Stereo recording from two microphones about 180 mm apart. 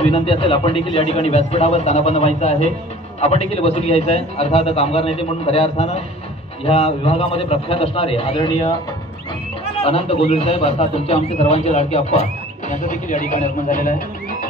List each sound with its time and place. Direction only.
0.0 s a man's voice: 35° left (ahead or behind)
9.8 s a man's voice: 35° left (ahead or behind); by 14.0 s 50° left (ahead or behind)